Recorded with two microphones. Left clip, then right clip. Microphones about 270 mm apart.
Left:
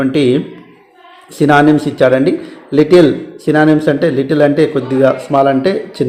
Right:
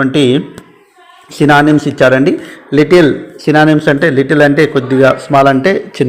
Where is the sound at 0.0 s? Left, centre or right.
Centre.